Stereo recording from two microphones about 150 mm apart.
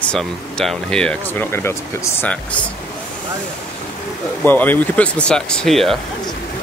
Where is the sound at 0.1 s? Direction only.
5° left (ahead or behind).